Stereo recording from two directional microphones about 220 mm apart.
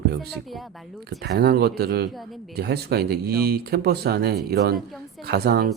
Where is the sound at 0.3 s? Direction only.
Centre (ahead or behind).